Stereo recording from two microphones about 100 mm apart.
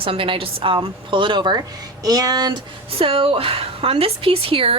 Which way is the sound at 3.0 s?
70° right (ahead or behind).